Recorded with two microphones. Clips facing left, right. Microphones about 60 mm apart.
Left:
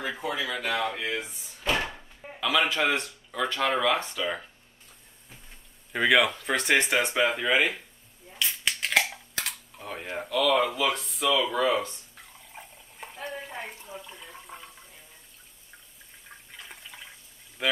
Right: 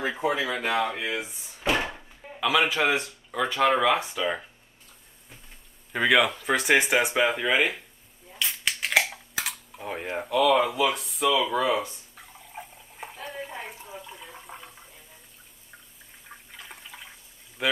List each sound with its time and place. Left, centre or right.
0.2 s speech: right
2.4 s speech: centre
5.9 s speech: centre
8.4 s a sound: centre
9.8 s speech: centre
10.5 s fowl: centre
16.3 s toilet flush: centre
17.6 s speech: centre